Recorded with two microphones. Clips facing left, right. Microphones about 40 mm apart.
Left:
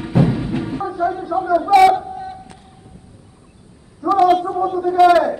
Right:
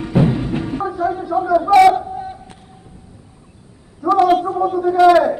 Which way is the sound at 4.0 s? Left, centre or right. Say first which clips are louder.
Even; centre.